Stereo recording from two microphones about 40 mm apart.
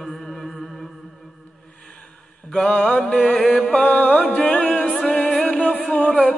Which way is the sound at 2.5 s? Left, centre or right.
Left.